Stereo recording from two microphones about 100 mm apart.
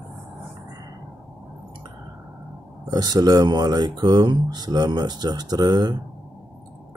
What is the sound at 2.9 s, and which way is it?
Speech, 40° right (ahead or behind).